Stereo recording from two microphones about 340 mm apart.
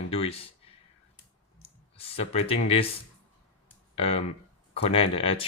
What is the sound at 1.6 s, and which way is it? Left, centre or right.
Clicking, centre.